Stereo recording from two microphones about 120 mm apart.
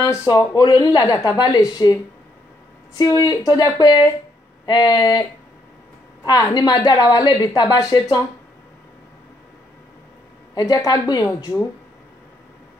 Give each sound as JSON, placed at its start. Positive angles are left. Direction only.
{"t": 0.0, "sound": "speech", "side_deg": 25}
{"t": 3.0, "sound": "a woman's voice", "side_deg": 30}
{"t": 6.2, "sound": "a woman's voice", "side_deg": 35}
{"t": 10.5, "sound": "a woman's voice", "side_deg": 30}